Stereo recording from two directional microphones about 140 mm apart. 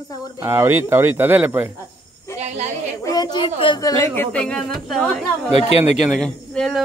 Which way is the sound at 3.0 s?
30° left (ahead or behind).